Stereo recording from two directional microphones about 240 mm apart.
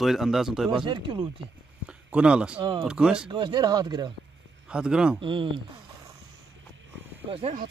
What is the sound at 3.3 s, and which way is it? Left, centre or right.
Speech, centre.